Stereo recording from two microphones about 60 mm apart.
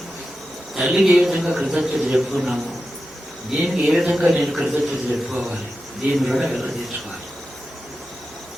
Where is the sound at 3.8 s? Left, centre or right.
Centre.